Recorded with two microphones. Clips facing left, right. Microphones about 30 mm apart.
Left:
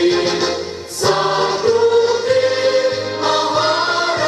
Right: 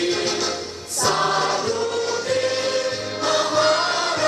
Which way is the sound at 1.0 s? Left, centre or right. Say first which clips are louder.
Left 4 dB; left.